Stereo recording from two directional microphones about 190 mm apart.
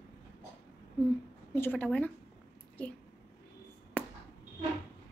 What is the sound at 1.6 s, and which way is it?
Speech, 10° left (ahead or behind).